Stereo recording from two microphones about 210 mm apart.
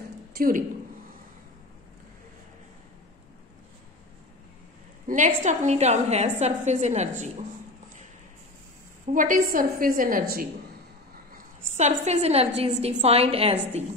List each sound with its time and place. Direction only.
0.4 s a woman's voice: 40° right (ahead or behind)
5.0 s a woman's voice: 35° right (ahead or behind)
9.1 s a woman's voice: 40° right (ahead or behind)
11.7 s a woman's voice: 35° right (ahead or behind)